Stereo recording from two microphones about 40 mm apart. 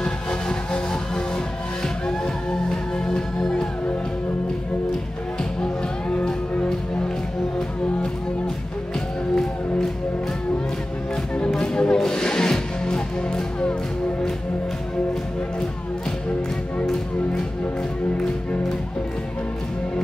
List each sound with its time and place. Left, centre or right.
0.0 s music: centre
2.0 s music: centre
5.4 s music: left
9.3 s music: centre
11.5 s music: centre